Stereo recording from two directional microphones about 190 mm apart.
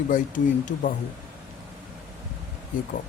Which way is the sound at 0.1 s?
40° left (ahead or behind).